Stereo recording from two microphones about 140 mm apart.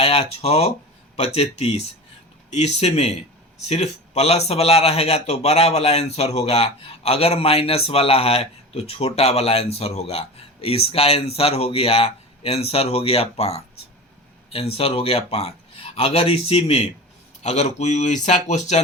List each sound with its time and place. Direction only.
0.0 s a man's voice: 45° left (ahead or behind)